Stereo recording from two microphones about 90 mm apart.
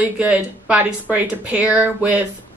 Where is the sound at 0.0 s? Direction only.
15° right (ahead or behind).